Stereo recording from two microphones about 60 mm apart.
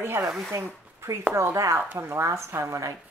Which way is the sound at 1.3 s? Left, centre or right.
Right.